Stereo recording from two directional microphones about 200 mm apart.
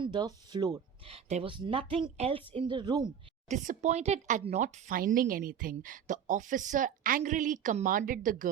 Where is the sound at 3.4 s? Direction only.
40° right (ahead or behind).